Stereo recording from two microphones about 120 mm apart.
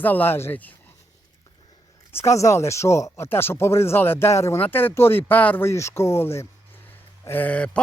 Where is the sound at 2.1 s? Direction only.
20° left (ahead or behind).